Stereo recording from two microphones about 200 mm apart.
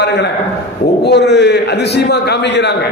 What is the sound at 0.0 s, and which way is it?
A man's voice, 60° left (ahead or behind).